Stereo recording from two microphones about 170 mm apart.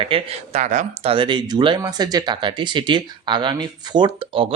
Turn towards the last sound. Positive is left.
turn(degrees=-30)  # may be behind; listen again after turning